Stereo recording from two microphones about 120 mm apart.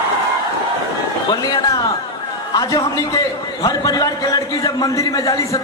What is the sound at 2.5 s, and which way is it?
A man's voice, 30° left (ahead or behind).